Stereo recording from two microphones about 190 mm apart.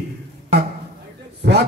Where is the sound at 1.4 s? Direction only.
60° right (ahead or behind).